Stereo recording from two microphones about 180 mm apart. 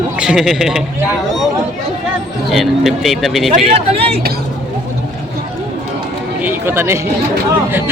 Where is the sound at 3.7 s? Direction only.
35° right (ahead or behind).